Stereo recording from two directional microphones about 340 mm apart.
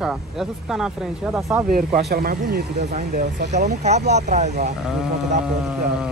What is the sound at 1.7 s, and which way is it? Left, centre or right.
Speech, right.